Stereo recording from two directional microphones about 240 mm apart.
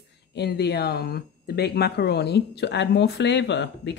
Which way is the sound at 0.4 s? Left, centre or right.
Left.